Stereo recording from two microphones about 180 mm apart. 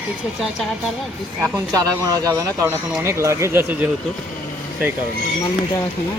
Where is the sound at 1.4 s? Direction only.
20° right (ahead or behind).